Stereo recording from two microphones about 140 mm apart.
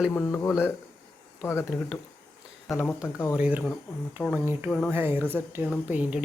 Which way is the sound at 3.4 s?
10° right (ahead or behind).